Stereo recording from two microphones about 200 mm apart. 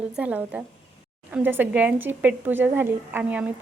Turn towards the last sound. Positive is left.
turn(degrees=-5)  # may be behind; listen again after turning